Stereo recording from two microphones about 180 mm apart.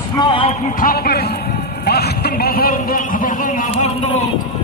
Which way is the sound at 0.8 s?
55° left (ahead or behind).